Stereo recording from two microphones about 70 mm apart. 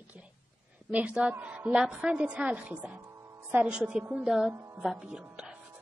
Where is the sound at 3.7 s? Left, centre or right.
Centre.